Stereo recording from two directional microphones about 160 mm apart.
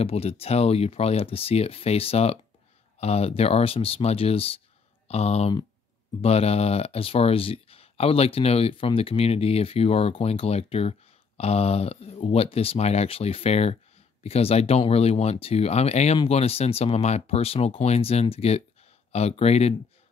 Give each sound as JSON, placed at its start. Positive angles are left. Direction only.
{"t": 0.0, "sound": "speech", "side_deg": 40}